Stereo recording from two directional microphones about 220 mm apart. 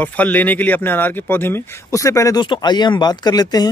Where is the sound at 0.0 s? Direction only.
5° left (ahead or behind).